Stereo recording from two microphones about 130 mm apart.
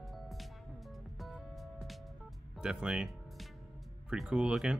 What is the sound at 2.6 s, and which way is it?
Speech, 5° right (ahead or behind).